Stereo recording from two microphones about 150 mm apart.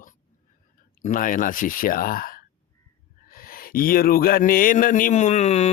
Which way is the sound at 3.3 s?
75° left (ahead or behind).